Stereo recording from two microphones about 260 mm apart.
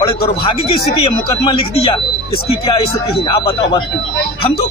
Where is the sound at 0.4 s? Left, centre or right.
Centre.